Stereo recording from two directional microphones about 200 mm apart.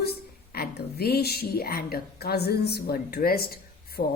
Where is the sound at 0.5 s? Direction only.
50° left (ahead or behind).